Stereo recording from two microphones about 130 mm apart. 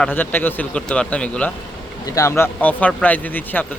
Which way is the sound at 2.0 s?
25° left (ahead or behind).